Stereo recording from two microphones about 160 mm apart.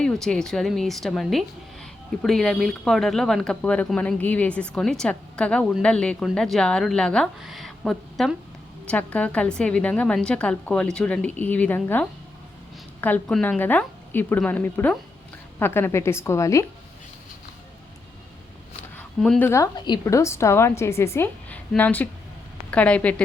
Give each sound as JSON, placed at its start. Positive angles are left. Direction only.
{"t": 0.0, "sound": "a woman's voice", "side_deg": 5}
{"t": 18.9, "sound": "a sound", "side_deg": 5}
{"t": 19.5, "sound": "a woman's voice", "side_deg": 20}